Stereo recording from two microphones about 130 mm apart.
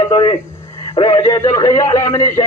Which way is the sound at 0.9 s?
25° left (ahead or behind).